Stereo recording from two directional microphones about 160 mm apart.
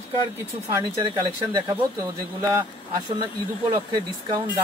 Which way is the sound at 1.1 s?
25° right (ahead or behind).